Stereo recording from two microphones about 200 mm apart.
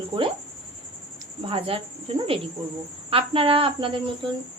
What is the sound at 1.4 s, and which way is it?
Speech, 30° right (ahead or behind).